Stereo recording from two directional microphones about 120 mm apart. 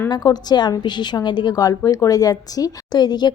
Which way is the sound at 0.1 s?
35° left (ahead or behind).